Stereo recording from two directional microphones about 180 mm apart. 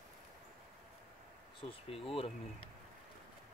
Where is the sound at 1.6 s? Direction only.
30° left (ahead or behind).